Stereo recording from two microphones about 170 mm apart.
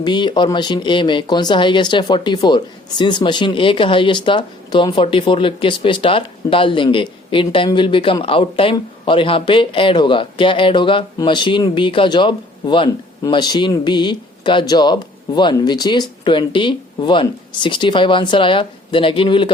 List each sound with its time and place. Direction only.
0.0 s speech: 25° left (ahead or behind)